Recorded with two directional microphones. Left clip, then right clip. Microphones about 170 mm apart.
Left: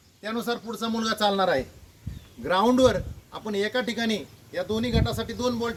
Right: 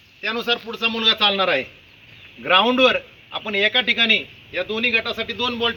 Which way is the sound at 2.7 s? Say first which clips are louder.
Right 4 dB; 5° right (ahead or behind).